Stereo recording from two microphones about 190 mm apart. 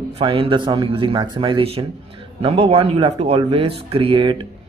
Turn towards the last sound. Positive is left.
turn(degrees=-30)  # may be behind; listen again after turning